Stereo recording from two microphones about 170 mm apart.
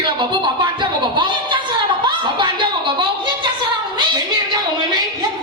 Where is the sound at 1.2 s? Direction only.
30° right (ahead or behind).